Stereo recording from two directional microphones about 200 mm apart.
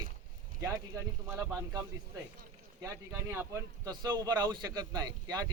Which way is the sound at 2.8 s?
15° right (ahead or behind).